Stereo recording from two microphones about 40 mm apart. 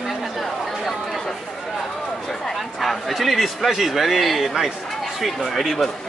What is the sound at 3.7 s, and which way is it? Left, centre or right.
A man's voice, centre.